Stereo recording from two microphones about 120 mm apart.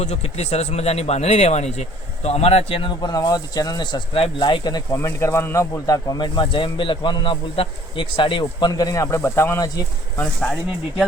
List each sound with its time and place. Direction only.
0.0 s speech: 65° left (ahead or behind)
3.0 s a man's voice: 35° left (ahead or behind)
4.1 s a man's voice: 45° left (ahead or behind)
4.9 s a man's voice: 25° left (ahead or behind)